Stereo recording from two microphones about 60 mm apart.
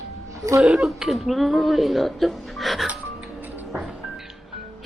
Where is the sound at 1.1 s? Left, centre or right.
Centre.